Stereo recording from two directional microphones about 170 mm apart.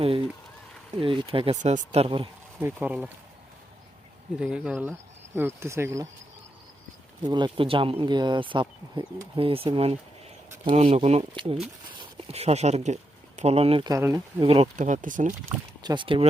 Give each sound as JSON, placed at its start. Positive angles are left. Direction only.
{"t": 0.9, "sound": "speech", "side_deg": -30}
{"t": 2.6, "sound": "speech", "side_deg": -10}
{"t": 4.4, "sound": "speech", "side_deg": -5}
{"t": 7.3, "sound": "speech", "side_deg": -25}
{"t": 13.9, "sound": "speech", "side_deg": -20}
{"t": 14.4, "sound": "speech", "side_deg": -35}
{"t": 14.8, "sound": "speech", "side_deg": -45}
{"t": 15.8, "sound": "speech", "side_deg": -25}